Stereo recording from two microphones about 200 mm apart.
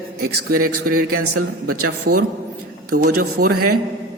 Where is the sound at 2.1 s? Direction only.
50° right (ahead or behind).